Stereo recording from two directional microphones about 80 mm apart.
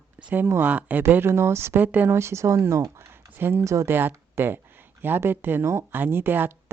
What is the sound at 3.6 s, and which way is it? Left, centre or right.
Speech, right.